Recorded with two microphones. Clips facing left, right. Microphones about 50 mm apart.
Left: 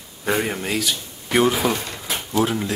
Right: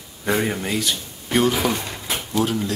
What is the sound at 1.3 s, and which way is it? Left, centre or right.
Speech, centre.